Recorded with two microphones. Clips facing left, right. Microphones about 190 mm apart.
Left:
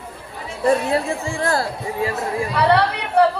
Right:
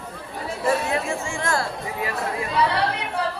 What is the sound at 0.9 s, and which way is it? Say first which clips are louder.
Chatter: left 4 dB; 35° left (ahead or behind).